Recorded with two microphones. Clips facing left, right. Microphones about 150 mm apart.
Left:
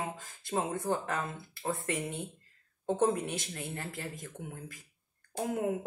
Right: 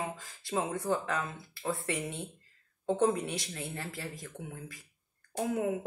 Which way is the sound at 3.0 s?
45° left (ahead or behind).